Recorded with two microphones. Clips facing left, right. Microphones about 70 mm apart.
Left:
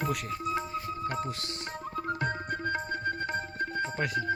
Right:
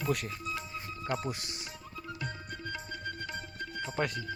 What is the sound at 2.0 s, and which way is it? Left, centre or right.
Tabla, left.